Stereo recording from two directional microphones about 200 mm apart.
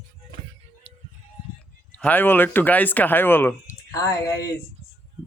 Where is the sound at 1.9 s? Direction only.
10° left (ahead or behind).